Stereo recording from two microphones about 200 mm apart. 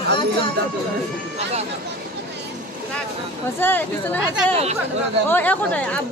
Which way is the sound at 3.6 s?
10° left (ahead or behind).